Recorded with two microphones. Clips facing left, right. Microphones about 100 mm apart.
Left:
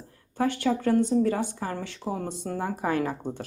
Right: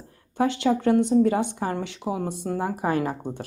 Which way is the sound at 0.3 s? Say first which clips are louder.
Right 3 dB; 20° right (ahead or behind).